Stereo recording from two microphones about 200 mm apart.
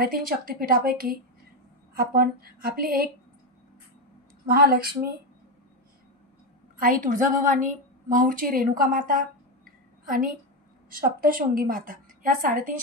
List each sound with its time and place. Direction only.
0.0 s a woman's voice: 45° right (ahead or behind)
4.5 s a woman's voice: 50° right (ahead or behind)
6.8 s a woman's voice: 40° right (ahead or behind)